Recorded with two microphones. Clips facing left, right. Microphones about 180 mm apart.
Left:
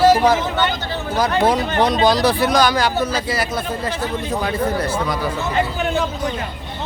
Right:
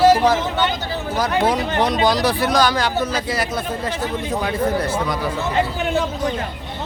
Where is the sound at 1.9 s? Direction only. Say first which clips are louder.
Left 3 dB; 30° left (ahead or behind).